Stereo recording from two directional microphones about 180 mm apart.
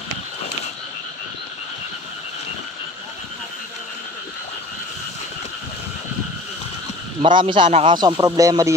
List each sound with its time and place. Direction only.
7.2 s a man's voice: 25° right (ahead or behind)